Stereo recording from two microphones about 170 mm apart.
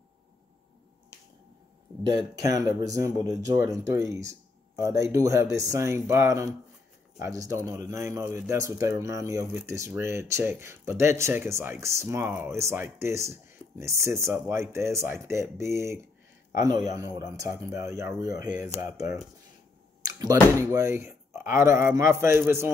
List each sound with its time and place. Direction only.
2.1 s speech: 20° right (ahead or behind)
20.0 s a sound: 20° right (ahead or behind)
20.5 s speech: 15° right (ahead or behind)